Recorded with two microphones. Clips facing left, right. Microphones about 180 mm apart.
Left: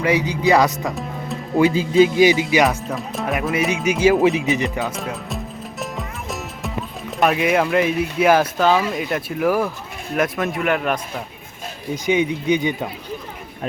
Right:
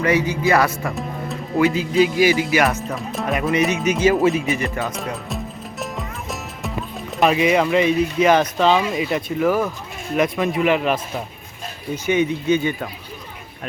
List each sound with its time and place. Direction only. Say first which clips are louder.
0.0 s speech: even; 15° left (ahead or behind)
1.5 s speech: left 2 dB; 30° left (ahead or behind)
2.9 s speech: even; centre (ahead or behind); by 4.6 s 20° left (ahead or behind)
4.6 s speech: left 1 dB; 5° left (ahead or behind)
5.8 s music: even; centre (ahead or behind)
7.2 s speech: right 1 dB; centre (ahead or behind)
12.0 s speech: even; 15° left (ahead or behind)